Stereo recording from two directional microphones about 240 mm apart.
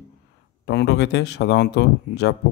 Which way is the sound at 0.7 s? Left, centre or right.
Left.